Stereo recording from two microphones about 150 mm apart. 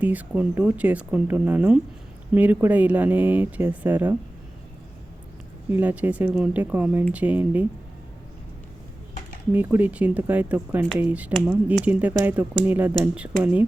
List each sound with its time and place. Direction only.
0.0 s speech: 10° right (ahead or behind)
5.7 s speech: 10° right (ahead or behind)
9.5 s speech: 10° right (ahead or behind)